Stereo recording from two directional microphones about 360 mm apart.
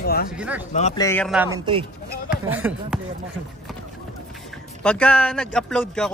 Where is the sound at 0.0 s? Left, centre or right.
Left.